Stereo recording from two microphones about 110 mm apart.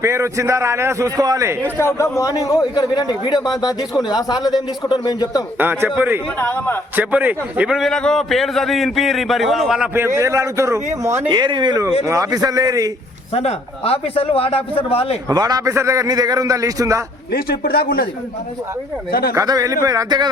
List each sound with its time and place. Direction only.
0.0 s a man's voice: 25° right (ahead or behind)
1.8 s a man's voice: 25° left (ahead or behind)
5.5 s a man's voice: 15° right (ahead or behind)
6.4 s a man's voice: 20° left (ahead or behind)
6.9 s a man's voice: 15° right (ahead or behind)
7.7 s a man's voice: 5° left (ahead or behind)
9.9 s a man's voice: 25° right (ahead or behind)
11.3 s speech: 45° right (ahead or behind)
12.0 s a man's voice: 30° right (ahead or behind)
13.3 s a man's voice: 65° left (ahead or behind)
15.3 s a man's voice: 35° right (ahead or behind)
19.3 s a man's voice: 30° right (ahead or behind)